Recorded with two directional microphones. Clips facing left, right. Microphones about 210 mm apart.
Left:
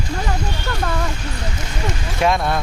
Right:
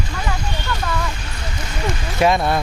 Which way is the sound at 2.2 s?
Centre (ahead or behind).